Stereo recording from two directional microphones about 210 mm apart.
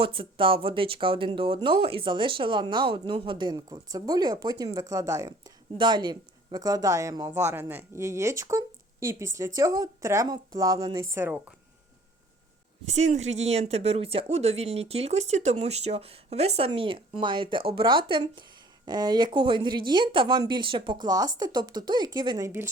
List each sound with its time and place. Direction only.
0.0 s speech: 25° right (ahead or behind)
12.9 s speech: 35° right (ahead or behind); by 22.6 s 15° right (ahead or behind)